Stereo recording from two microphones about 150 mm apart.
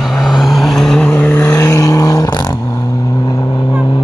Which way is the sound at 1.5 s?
25° left (ahead or behind).